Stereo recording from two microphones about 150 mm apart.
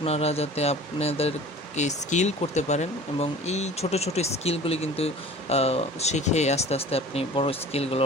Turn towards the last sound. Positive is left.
turn(degrees=40)  # may be behind; listen again after turning